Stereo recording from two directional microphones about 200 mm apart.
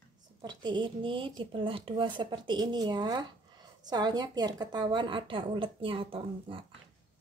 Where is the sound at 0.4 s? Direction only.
20° right (ahead or behind).